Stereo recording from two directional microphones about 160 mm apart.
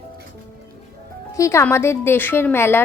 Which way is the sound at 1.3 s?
20° left (ahead or behind).